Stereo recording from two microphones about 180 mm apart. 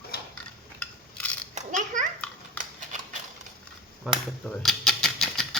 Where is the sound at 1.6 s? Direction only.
45° right (ahead or behind).